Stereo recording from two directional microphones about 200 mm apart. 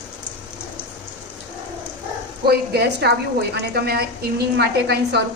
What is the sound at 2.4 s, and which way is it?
A woman's voice, 55° right (ahead or behind).